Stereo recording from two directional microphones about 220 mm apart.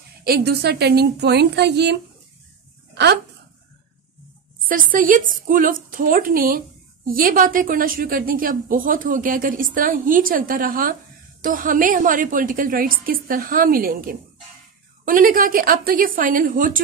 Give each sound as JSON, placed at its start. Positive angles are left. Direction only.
{"t": 0.2, "sound": "a woman's voice", "side_deg": -45}
{"t": 2.9, "sound": "a sound", "side_deg": -50}
{"t": 4.6, "sound": "a woman's voice", "side_deg": -40}